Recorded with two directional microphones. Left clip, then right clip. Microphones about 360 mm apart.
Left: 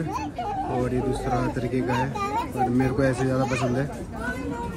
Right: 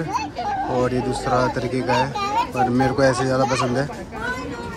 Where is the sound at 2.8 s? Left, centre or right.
Centre.